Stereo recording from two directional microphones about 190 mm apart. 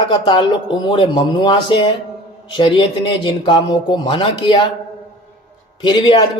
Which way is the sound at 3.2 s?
25° left (ahead or behind).